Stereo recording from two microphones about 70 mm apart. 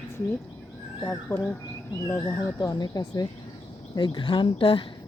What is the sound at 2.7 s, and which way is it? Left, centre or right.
Speech, left.